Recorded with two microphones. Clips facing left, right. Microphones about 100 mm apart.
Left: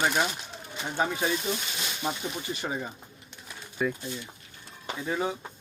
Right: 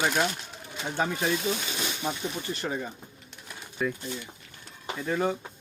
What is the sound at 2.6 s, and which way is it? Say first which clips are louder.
Speech: right 1 dB; 10° left (ahead or behind).